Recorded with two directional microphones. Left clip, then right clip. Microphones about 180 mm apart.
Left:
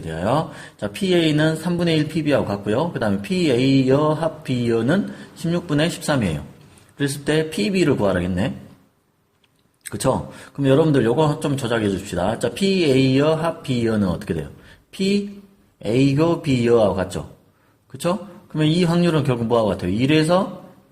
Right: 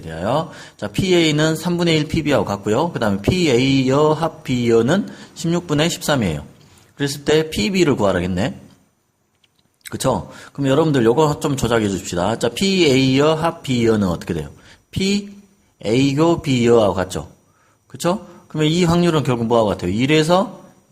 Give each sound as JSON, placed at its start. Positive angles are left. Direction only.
{"t": 0.0, "sound": "speech", "side_deg": -10}
{"t": 9.8, "sound": "speech", "side_deg": -20}